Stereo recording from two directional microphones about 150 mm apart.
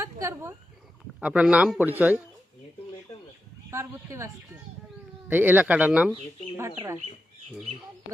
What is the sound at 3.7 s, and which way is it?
A woman's voice, 20° right (ahead or behind).